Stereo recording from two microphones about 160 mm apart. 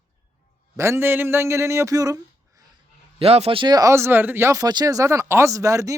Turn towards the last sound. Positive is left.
turn(degrees=-20)  # may be behind; listen again after turning